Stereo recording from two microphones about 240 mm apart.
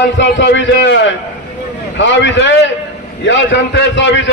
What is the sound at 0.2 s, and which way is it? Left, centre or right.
A man's voice, left.